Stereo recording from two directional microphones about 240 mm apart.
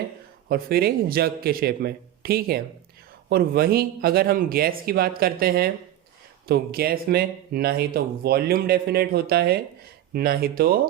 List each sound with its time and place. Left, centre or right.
0.4 s speech: right